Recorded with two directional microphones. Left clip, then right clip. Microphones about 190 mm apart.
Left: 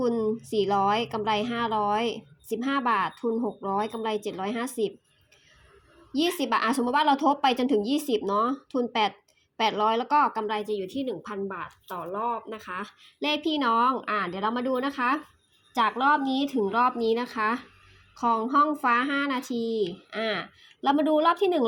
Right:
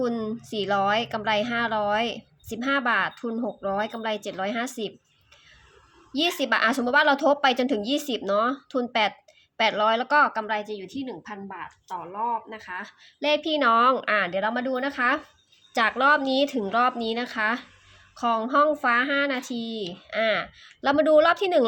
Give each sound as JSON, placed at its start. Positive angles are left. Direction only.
{"t": 0.0, "sound": "speech", "side_deg": -15}
{"t": 6.1, "sound": "a woman's voice", "side_deg": -10}
{"t": 13.1, "sound": "speech", "side_deg": 0}
{"t": 15.7, "sound": "speech", "side_deg": -15}